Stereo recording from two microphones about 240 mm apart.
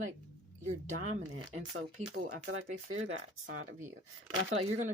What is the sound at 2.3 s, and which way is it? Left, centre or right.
Speech, right.